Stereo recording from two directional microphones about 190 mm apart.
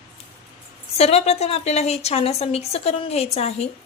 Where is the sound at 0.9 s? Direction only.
35° left (ahead or behind).